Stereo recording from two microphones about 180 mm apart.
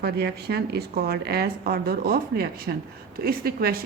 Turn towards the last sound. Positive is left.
turn(degrees=-55)  # may be behind; listen again after turning